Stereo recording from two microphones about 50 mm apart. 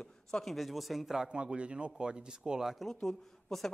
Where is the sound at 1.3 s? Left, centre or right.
Right.